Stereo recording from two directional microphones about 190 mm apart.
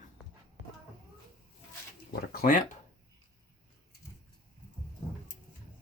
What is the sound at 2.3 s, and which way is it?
Speech, 50° left (ahead or behind).